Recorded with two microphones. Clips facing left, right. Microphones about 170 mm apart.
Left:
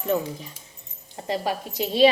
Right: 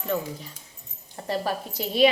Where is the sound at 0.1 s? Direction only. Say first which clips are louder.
Left 4 dB; 20° left (ahead or behind).